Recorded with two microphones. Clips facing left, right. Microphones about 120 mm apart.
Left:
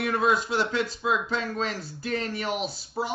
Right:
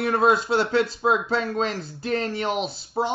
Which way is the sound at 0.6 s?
30° right (ahead or behind).